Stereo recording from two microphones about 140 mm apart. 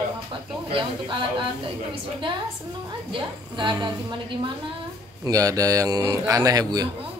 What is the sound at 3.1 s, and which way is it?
A woman's voice, 35° right (ahead or behind).